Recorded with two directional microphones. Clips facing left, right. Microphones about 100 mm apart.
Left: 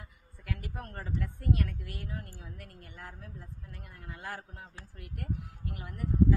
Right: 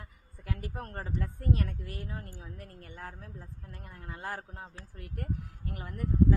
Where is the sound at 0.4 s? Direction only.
30° right (ahead or behind).